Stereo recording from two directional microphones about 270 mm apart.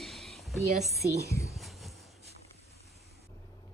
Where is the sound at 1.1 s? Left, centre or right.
Right.